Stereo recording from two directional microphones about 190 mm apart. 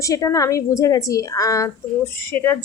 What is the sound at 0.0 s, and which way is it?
A woman's voice, 15° left (ahead or behind).